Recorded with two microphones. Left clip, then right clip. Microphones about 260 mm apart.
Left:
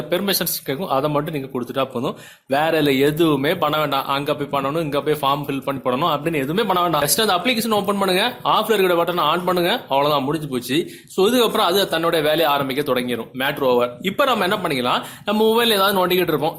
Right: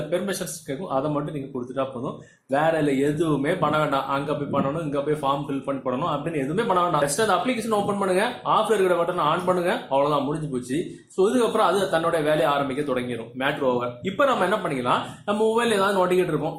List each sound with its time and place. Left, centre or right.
0.1 s a man's voice: left
11.2 s a man's voice: left